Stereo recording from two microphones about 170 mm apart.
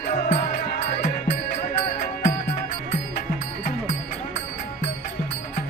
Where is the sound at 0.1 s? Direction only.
40° left (ahead or behind).